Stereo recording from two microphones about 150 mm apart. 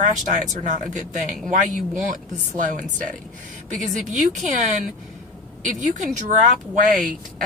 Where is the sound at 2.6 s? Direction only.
60° right (ahead or behind).